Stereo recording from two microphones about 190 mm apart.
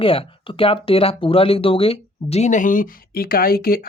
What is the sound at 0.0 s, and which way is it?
Speech, 30° left (ahead or behind).